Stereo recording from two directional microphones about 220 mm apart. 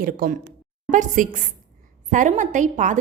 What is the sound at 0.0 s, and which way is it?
A woman's voice, 40° right (ahead or behind).